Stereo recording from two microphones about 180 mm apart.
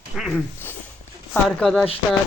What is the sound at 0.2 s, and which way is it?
Speech, centre (ahead or behind).